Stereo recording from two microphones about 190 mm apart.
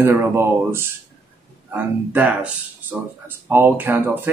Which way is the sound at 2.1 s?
10° right (ahead or behind).